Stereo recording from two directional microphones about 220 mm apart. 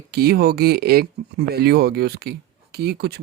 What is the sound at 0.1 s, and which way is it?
Speech, 45° right (ahead or behind).